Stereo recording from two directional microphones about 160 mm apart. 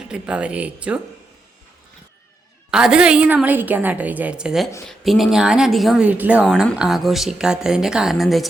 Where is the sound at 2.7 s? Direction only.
5° right (ahead or behind).